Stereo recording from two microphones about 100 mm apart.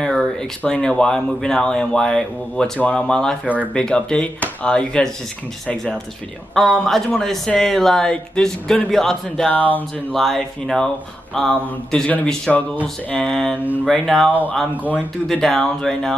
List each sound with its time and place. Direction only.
0.0 s a sound: 5° left (ahead or behind)
0.6 s speech: 10° left (ahead or behind)
6.5 s speech: centre (ahead or behind)
9.5 s speech: 15° left (ahead or behind)
10.1 s speech: centre (ahead or behind)
14.8 s speech: 15° right (ahead or behind)
15.2 s speech: 5° left (ahead or behind)